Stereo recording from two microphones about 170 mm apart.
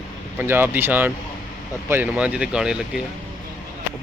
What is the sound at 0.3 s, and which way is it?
A man's voice, 10° right (ahead or behind).